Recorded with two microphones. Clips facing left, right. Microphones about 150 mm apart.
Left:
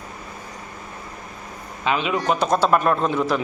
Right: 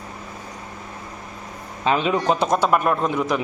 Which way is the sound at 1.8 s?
35° right (ahead or behind).